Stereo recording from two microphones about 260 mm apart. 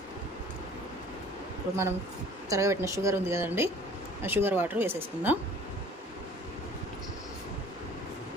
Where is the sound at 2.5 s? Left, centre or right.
Centre.